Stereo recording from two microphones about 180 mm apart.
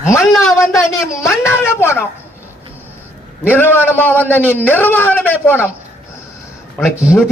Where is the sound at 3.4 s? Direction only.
10° left (ahead or behind).